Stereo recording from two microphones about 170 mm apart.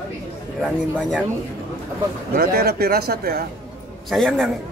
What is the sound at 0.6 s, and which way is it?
Speech, centre (ahead or behind).